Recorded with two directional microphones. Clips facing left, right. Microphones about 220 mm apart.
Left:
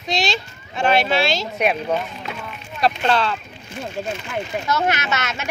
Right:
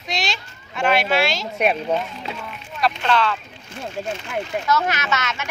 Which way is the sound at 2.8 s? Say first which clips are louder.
Left 1 dB; 30° left (ahead or behind).